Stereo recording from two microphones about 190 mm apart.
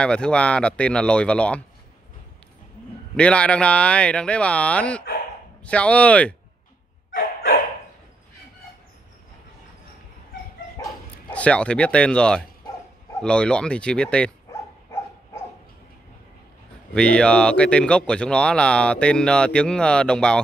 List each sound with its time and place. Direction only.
0.0 s speech: 5° left (ahead or behind)
3.2 s speech: 5° left (ahead or behind)
11.3 s speech: 5° left (ahead or behind)
16.9 s speech: 5° left (ahead or behind)